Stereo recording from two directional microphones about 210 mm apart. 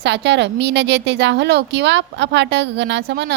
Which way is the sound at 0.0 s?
55° right (ahead or behind).